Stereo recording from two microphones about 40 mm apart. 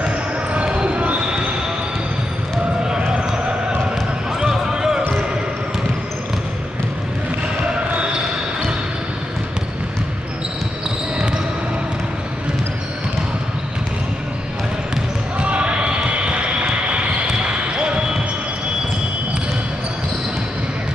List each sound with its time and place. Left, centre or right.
0.0 s basketball bounce: right
3.1 s basketball bounce: centre
7.9 s basketball bounce: right
15.3 s basketball bounce: right